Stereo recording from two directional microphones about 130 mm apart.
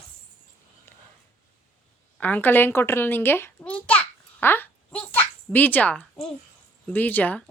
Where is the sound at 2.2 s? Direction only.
15° left (ahead or behind).